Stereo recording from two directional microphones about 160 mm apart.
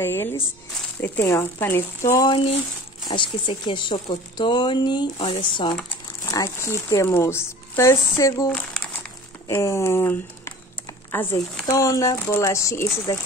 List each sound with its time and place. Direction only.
0.0 s speech: 15° left (ahead or behind)
3.1 s speech: 30° left (ahead or behind)
6.2 s speech: 20° left (ahead or behind)
9.5 s speech: 20° left (ahead or behind)